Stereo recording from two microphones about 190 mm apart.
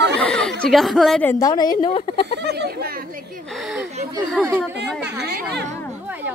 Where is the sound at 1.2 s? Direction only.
20° left (ahead or behind).